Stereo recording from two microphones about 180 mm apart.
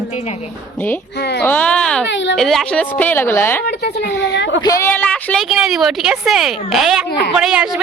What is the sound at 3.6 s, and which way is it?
Speech, 65° left (ahead or behind).